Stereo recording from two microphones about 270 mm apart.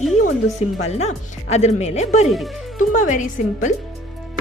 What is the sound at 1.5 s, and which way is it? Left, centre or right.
A woman's voice, left.